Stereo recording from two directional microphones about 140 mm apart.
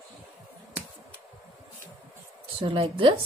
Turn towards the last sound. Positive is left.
turn(degrees=-40)  # may be behind; listen again after turning